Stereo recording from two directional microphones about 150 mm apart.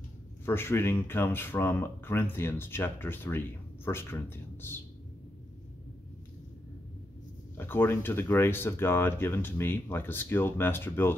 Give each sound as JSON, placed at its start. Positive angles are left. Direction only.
{"t": 0.5, "sound": "speech", "side_deg": 15}
{"t": 7.5, "sound": "speech", "side_deg": 15}